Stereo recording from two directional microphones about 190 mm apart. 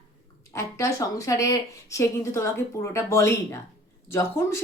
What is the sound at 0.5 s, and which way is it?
Speech, 15° left (ahead or behind).